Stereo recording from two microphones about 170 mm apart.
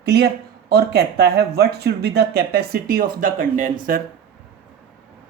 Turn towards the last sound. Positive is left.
turn(degrees=-50)  # may be behind; listen again after turning